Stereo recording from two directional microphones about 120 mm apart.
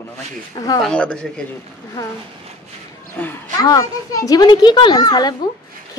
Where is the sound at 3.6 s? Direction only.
30° left (ahead or behind).